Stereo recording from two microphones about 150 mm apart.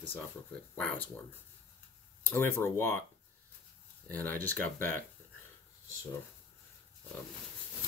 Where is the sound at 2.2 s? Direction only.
15° left (ahead or behind).